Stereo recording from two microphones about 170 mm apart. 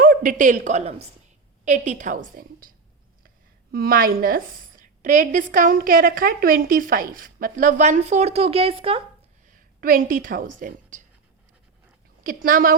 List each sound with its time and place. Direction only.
0.0 s a woman's voice: 55° right (ahead or behind); by 9.0 s 35° right (ahead or behind)
9.5 s a woman's voice: 55° right (ahead or behind)
12.2 s a woman's voice: 55° right (ahead or behind)